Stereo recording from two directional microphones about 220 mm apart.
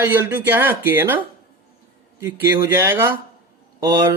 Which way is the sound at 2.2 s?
10° right (ahead or behind).